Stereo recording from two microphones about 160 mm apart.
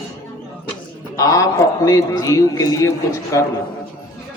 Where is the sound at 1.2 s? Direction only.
20° left (ahead or behind).